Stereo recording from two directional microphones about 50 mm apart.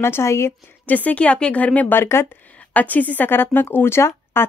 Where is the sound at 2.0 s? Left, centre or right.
Left.